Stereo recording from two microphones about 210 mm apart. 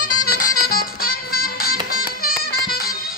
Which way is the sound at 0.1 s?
90° left.